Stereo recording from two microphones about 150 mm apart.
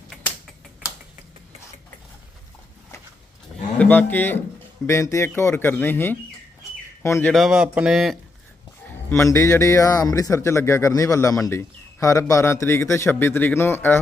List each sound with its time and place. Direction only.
3.8 s a man's voice: 10° left (ahead or behind)
7.3 s speech: 5° right (ahead or behind)
8.9 s a man's voice: 15° left (ahead or behind)